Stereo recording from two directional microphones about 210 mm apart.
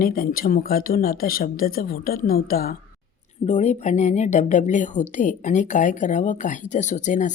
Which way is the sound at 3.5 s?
35° left (ahead or behind).